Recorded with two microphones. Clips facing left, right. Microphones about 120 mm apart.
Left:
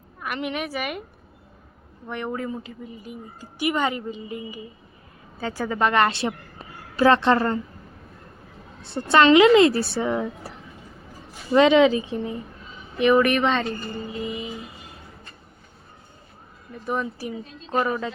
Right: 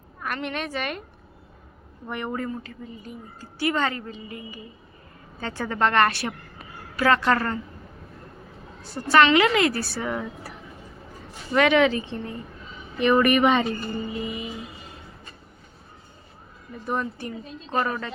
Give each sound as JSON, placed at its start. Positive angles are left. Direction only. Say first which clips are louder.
{"t": 0.4, "sound": "a woman's voice", "louder": "left 2 dB", "side_deg": 10}
{"t": 2.0, "sound": "speech", "louder": "left 1 dB", "side_deg": 0}
{"t": 2.5, "sound": "a woman's voice", "louder": "left 1 dB", "side_deg": 10}
{"t": 5.4, "sound": "a woman's voice", "louder": "left 1 dB", "side_deg": 10}
{"t": 8.9, "sound": "speech", "louder": "left 2 dB", "side_deg": 25}
{"t": 11.5, "sound": "a woman's voice", "louder": "left 4 dB", "side_deg": 20}
{"t": 16.8, "sound": "a woman's voice", "louder": "left 1 dB", "side_deg": 0}